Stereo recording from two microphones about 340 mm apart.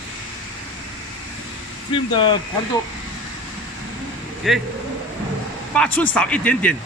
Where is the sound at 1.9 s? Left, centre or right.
Centre.